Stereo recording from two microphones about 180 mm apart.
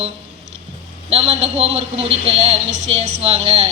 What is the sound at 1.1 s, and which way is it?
Speech, 35° right (ahead or behind).